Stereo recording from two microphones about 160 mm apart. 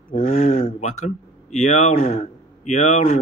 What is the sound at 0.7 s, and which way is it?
Speech, 50° left (ahead or behind).